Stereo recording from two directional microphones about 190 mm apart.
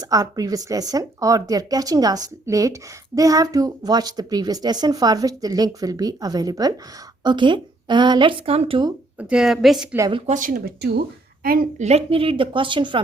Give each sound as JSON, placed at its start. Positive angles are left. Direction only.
{"t": 0.0, "sound": "a woman's voice", "side_deg": -20}
{"t": 9.3, "sound": "a woman's voice", "side_deg": -5}
{"t": 10.0, "sound": "a woman's voice", "side_deg": -25}
{"t": 10.3, "sound": "a woman's voice", "side_deg": -45}